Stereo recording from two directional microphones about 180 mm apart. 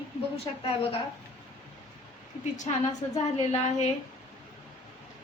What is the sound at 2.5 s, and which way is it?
Speech, 40° left (ahead or behind).